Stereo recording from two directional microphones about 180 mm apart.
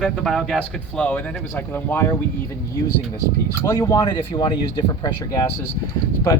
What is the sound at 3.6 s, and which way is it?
Speech, 20° left (ahead or behind).